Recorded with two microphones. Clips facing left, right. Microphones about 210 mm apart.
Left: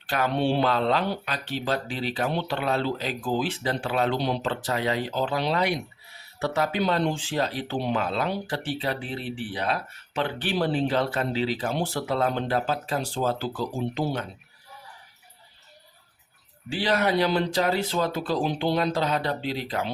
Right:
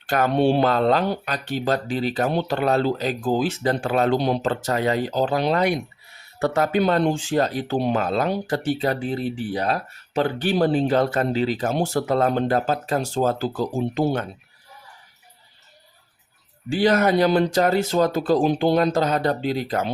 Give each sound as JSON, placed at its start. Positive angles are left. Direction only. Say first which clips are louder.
{"t": 0.1, "sound": "speech", "louder": "right 5 dB", "side_deg": -45}
{"t": 16.6, "sound": "speech", "louder": "right 6 dB", "side_deg": -45}